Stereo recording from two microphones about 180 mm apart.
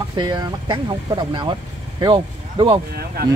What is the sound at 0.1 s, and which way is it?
Speech, 25° right (ahead or behind).